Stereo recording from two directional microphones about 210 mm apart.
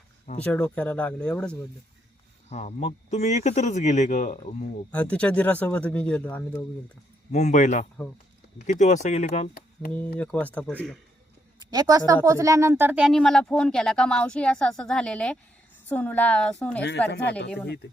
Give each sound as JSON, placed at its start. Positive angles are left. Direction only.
{"t": 0.4, "sound": "speech", "side_deg": 5}
{"t": 2.5, "sound": "speech", "side_deg": 30}
{"t": 4.9, "sound": "speech", "side_deg": 5}
{"t": 7.3, "sound": "speech", "side_deg": 35}
{"t": 10.2, "sound": "speech", "side_deg": 5}
{"t": 11.7, "sound": "speech", "side_deg": -20}
{"t": 17.1, "sound": "speech", "side_deg": 55}